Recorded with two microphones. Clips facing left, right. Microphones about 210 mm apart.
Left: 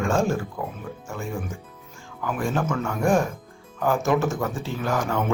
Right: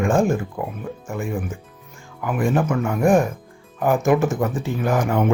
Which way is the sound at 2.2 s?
15° right (ahead or behind).